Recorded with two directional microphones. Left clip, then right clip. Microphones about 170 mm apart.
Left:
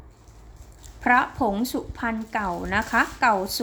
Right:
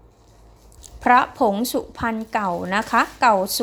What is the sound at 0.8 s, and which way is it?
A woman's voice, 30° right (ahead or behind).